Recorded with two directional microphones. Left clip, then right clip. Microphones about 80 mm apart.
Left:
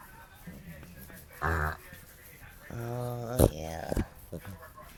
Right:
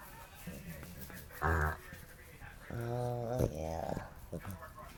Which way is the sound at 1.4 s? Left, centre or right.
Left.